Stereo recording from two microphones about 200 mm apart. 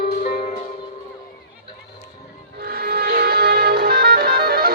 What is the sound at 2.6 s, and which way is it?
Music, 50° right (ahead or behind).